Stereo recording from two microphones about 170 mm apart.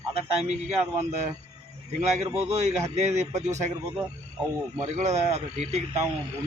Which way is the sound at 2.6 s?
40° right (ahead or behind).